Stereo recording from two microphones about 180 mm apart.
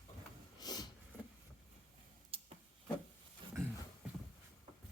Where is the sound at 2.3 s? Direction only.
30° right (ahead or behind).